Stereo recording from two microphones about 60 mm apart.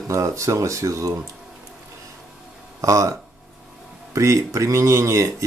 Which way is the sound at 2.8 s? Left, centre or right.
Right.